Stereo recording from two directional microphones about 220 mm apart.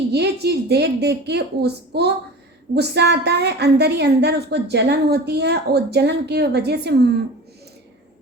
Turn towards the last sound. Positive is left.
turn(degrees=-45)  # may be behind; listen again after turning